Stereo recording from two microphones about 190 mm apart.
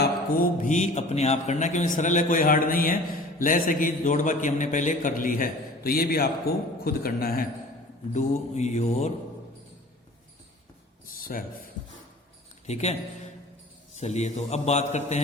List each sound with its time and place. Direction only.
0.6 s a man's voice: 40° left (ahead or behind)
8.1 s a man's voice: 40° left (ahead or behind)
11.0 s a sound: 50° left (ahead or behind)
12.6 s a man's voice: 35° left (ahead or behind)